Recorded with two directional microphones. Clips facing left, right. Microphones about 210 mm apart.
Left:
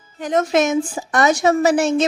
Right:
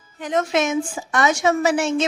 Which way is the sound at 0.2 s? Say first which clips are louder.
Left 3 dB; 40° left (ahead or behind).